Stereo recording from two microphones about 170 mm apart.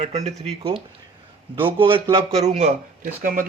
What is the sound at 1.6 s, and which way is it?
Speech, 30° right (ahead or behind).